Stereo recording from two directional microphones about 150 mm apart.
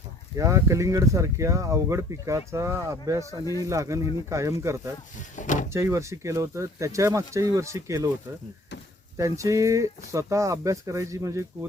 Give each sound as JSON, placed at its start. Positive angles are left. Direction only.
{"t": 0.3, "sound": "speech", "side_deg": -20}
{"t": 5.4, "sound": "speech", "side_deg": 55}
{"t": 5.7, "sound": "speech", "side_deg": -20}
{"t": 9.1, "sound": "speech", "side_deg": -20}